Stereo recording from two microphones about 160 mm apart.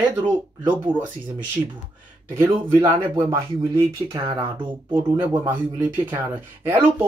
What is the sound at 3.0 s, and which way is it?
Speech, 30° right (ahead or behind).